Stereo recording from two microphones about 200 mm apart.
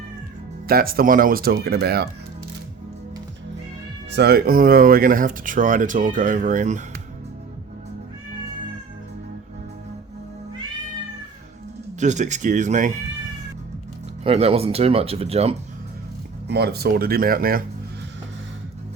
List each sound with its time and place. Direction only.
0.7 s speech: 45° right (ahead or behind)
4.1 s speech: 55° right (ahead or behind)
11.9 s speech: 35° right (ahead or behind)
14.3 s speech: 30° right (ahead or behind)
16.5 s speech: 55° right (ahead or behind)